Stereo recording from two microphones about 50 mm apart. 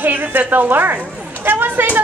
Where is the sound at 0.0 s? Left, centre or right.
Right.